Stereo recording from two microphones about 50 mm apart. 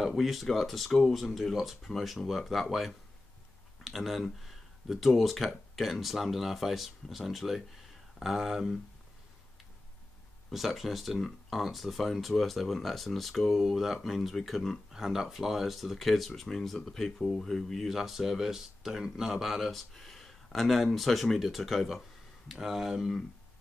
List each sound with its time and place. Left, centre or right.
0.0 s speech: centre
10.5 s speech: centre
17.8 s speech: centre